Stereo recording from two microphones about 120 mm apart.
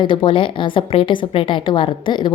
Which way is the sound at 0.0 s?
45° left (ahead or behind).